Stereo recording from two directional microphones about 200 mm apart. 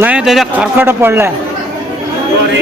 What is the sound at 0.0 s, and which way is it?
Speech, 5° right (ahead or behind).